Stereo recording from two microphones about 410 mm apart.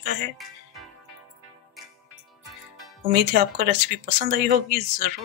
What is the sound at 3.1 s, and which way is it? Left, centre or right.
Speech, right.